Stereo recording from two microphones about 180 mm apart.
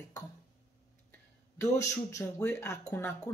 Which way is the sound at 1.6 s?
15° left (ahead or behind).